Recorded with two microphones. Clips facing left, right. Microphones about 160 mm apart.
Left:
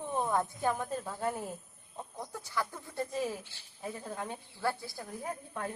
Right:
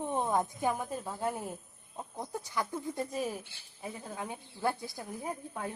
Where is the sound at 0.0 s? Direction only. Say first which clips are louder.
Right 1 dB; 20° right (ahead or behind).